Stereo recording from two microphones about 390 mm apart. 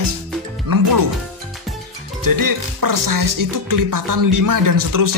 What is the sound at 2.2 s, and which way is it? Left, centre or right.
Music, right.